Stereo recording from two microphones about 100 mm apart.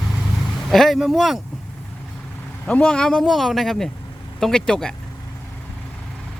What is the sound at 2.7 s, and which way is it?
Speech, 10° left (ahead or behind).